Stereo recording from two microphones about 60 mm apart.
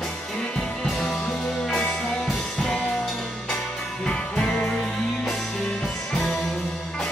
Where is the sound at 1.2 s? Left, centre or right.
Centre.